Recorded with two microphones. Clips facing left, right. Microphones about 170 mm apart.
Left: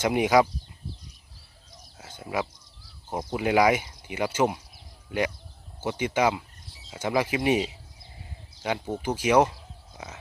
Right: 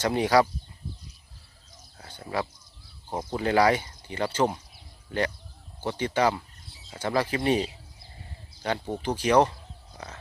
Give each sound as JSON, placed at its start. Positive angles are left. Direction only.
{"t": 0.0, "sound": "speech", "side_deg": 15}
{"t": 2.0, "sound": "a sound", "side_deg": 10}
{"t": 3.2, "sound": "speech", "side_deg": 10}